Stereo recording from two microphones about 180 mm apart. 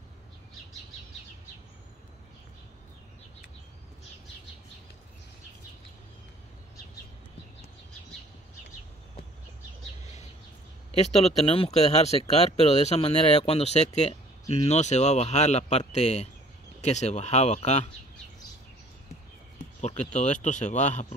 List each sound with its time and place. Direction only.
10.9 s speech: 35° left (ahead or behind)
19.8 s speech: 40° left (ahead or behind)